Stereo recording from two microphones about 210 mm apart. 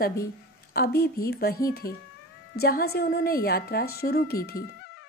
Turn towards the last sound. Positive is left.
turn(degrees=50)  # may be behind; listen again after turning